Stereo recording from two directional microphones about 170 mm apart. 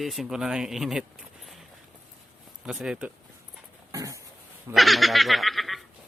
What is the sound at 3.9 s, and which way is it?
Throat clearing, 20° right (ahead or behind).